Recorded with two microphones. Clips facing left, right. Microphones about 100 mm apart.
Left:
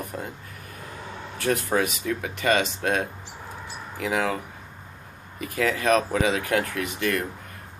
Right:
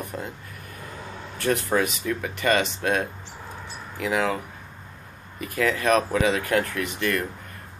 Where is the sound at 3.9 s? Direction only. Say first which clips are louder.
Right 1 dB; 50° left (ahead or behind).